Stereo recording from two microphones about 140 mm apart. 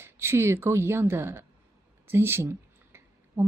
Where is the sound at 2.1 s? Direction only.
15° right (ahead or behind).